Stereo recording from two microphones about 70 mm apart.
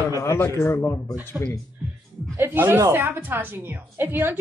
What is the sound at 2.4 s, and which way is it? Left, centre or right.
A woman's voice, right.